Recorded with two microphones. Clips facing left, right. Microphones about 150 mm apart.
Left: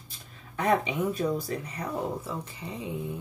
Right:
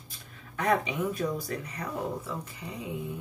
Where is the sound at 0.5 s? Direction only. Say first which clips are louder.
Left 2 dB; 25° left (ahead or behind).